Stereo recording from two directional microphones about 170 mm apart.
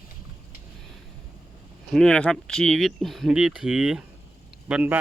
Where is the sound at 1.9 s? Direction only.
5° left (ahead or behind).